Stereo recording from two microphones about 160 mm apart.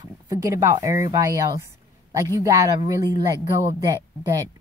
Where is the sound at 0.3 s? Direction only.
20° right (ahead or behind).